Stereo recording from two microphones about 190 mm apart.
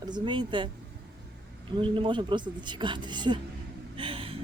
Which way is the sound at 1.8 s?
25° right (ahead or behind).